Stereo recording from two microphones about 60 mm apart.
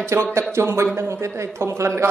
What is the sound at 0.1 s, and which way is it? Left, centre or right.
A man's voice, right.